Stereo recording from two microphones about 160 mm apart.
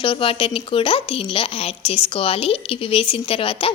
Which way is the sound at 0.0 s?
35° left (ahead or behind).